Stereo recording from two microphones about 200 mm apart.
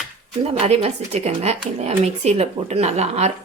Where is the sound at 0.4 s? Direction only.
30° right (ahead or behind).